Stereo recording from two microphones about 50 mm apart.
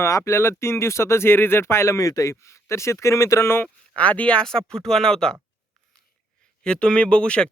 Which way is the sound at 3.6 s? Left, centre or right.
Left.